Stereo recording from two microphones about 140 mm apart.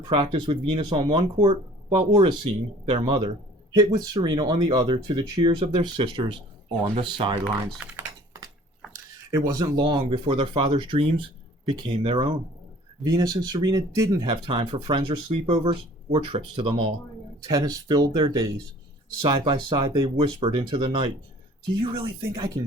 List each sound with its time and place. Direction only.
0.0 s speech: 35° right (ahead or behind)
7.9 s typing: 25° right (ahead or behind)
9.5 s speech: 25° right (ahead or behind)
13.1 s speech: 30° right (ahead or behind)
17.5 s speech: 30° right (ahead or behind)